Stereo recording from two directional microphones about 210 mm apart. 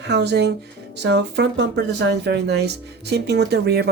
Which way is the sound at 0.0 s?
55° right (ahead or behind).